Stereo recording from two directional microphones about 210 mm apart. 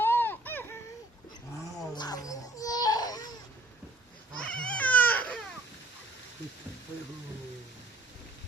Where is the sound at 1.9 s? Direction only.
20° left (ahead or behind).